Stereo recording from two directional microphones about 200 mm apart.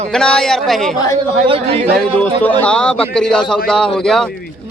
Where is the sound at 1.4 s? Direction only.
30° right (ahead or behind).